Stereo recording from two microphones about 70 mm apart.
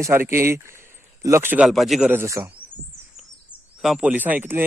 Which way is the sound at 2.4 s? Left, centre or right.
Right.